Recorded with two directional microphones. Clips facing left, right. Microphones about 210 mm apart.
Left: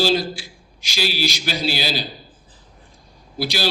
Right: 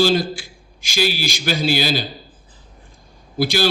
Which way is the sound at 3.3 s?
50° right (ahead or behind).